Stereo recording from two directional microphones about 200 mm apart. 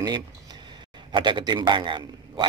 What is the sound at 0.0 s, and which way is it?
A man's voice, 20° right (ahead or behind).